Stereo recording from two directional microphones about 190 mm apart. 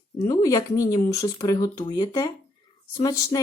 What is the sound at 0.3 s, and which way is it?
Speech, 15° left (ahead or behind).